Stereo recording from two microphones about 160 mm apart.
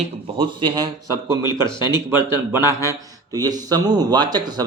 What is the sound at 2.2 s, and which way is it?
Speech, 15° right (ahead or behind).